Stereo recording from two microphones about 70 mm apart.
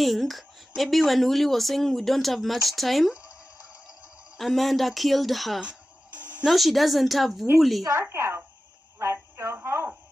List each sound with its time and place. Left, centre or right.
0.0 s speech: centre
4.4 s speech: centre
5.6 s music: centre
6.4 s speech: centre
7.9 s speech: right
8.9 s a sound: right